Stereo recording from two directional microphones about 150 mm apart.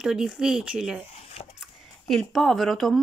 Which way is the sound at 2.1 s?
Centre (ahead or behind).